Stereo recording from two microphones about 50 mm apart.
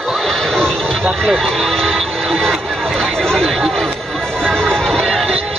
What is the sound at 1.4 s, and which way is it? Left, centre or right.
Vehicle, centre.